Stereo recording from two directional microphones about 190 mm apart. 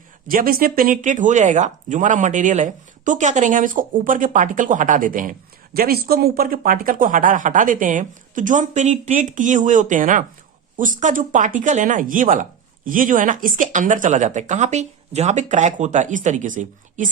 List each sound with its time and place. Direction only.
0.3 s speech: 50° right (ahead or behind)